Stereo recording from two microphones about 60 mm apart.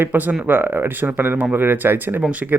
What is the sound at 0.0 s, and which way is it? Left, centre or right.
Speech, right.